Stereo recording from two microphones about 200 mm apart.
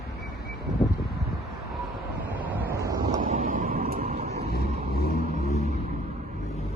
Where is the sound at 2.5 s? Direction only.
15° right (ahead or behind).